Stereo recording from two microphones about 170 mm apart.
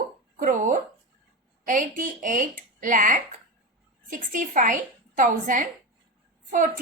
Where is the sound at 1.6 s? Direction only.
50° right (ahead or behind).